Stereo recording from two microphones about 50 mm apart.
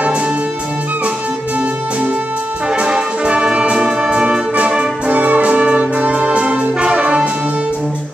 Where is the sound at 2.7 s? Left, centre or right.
Centre.